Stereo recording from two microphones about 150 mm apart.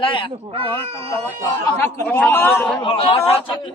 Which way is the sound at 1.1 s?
20° left (ahead or behind).